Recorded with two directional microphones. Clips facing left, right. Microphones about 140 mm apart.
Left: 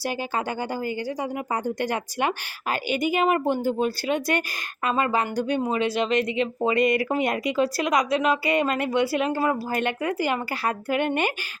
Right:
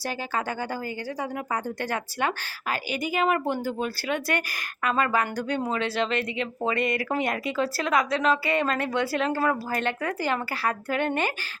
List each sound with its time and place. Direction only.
0.0 s speech: 15° left (ahead or behind)